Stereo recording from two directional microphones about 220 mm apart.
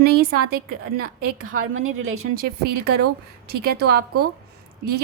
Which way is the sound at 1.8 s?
70° right (ahead or behind).